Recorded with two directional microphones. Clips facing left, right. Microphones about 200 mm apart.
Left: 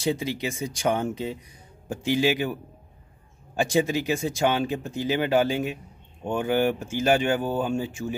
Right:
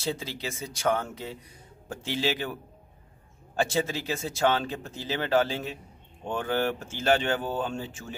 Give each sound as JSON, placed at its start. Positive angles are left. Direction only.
{"t": 0.0, "sound": "speech", "side_deg": 15}
{"t": 3.5, "sound": "speech", "side_deg": 15}